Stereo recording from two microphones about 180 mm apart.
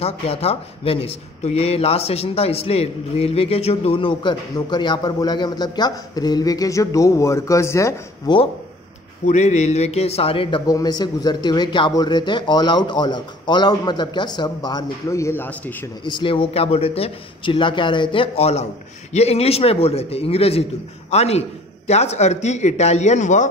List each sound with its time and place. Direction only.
0.0 s speech: 35° left (ahead or behind); by 8.4 s 15° left (ahead or behind)
9.2 s speech: 40° left (ahead or behind); by 15.7 s 10° left (ahead or behind)
16.0 s a man's voice: 25° left (ahead or behind); by 23.5 s 40° left (ahead or behind)